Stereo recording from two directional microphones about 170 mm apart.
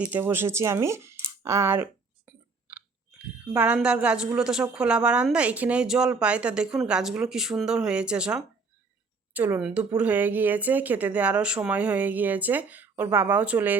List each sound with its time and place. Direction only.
0.0 s speech: 10° right (ahead or behind)
1.2 s a sound: 20° right (ahead or behind)
3.2 s a woman's voice: 10° right (ahead or behind)